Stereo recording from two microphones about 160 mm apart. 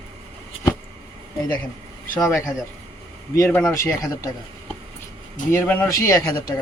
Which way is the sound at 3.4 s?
15° left (ahead or behind).